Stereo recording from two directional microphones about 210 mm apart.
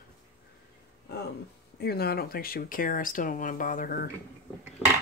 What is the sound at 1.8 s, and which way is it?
Speech, 50° left (ahead or behind).